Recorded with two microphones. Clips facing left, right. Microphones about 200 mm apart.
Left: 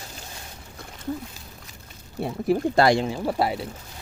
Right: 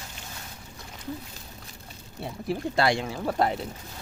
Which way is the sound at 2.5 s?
45° left (ahead or behind).